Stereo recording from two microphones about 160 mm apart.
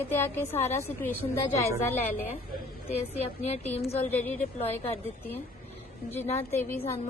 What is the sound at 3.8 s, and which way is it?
Speech, 40° left (ahead or behind).